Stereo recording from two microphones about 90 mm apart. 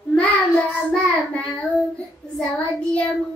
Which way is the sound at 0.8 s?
15° left (ahead or behind).